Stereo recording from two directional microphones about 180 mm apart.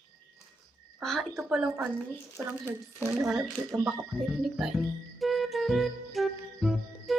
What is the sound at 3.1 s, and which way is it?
Speech, centre (ahead or behind).